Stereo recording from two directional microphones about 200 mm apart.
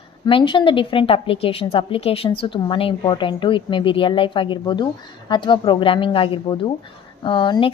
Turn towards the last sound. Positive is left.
turn(degrees=25)  # may be behind; listen again after turning